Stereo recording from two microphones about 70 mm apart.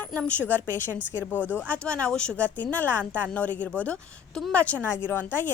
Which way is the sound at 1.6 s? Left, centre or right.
Centre.